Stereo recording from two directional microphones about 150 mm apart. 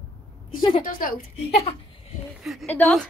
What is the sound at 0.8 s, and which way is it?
Speech, 65° left (ahead or behind).